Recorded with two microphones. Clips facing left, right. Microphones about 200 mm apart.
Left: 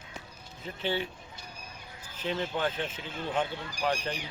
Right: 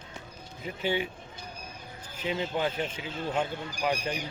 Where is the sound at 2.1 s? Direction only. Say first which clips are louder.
Right 1 dB; 10° right (ahead or behind).